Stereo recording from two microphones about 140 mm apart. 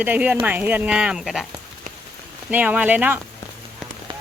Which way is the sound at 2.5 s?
10° right (ahead or behind).